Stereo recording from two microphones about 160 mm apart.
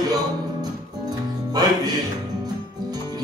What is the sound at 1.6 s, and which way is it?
Music, 25° right (ahead or behind).